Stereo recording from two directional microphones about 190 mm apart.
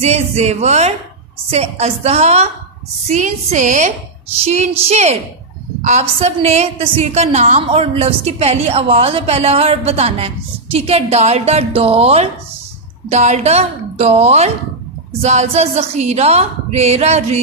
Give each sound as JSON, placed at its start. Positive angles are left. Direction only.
{"t": 0.0, "sound": "a woman's voice", "side_deg": -35}